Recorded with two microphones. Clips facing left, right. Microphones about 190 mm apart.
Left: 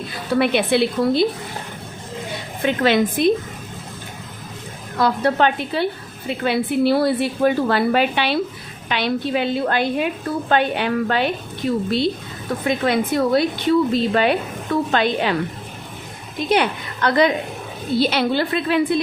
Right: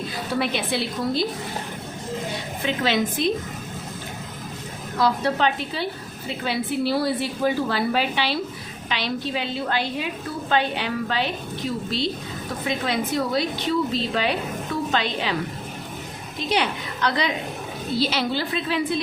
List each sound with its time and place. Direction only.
0.3 s a woman's voice: 60° left (ahead or behind)
2.6 s a woman's voice: 55° left (ahead or behind)
4.9 s a woman's voice: 55° left (ahead or behind)
16.5 s a woman's voice: 55° left (ahead or behind)